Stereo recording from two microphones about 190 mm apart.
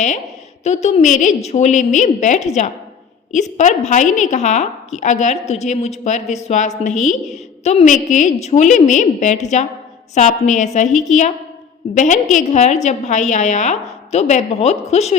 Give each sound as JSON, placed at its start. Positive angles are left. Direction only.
{"t": 0.6, "sound": "a woman's voice", "side_deg": 35}